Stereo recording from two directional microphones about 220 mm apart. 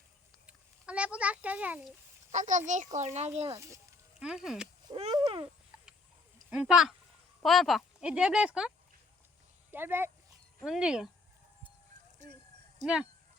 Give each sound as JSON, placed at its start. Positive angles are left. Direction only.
{"t": 0.4, "sound": "a sound", "side_deg": -5}
{"t": 2.3, "sound": "speech", "side_deg": -35}
{"t": 3.5, "sound": "speech", "side_deg": -15}
{"t": 4.2, "sound": "speech", "side_deg": -5}
{"t": 4.9, "sound": "speech", "side_deg": -25}
{"t": 6.5, "sound": "speech", "side_deg": 0}
{"t": 9.7, "sound": "speech", "side_deg": -10}
{"t": 12.8, "sound": "speech", "side_deg": -5}